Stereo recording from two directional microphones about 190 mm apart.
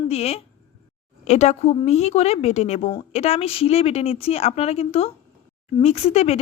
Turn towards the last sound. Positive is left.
turn(degrees=35)  # may be behind; listen again after turning